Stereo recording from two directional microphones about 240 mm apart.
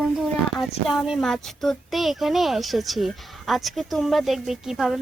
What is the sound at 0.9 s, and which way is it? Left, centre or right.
A woman's voice, centre.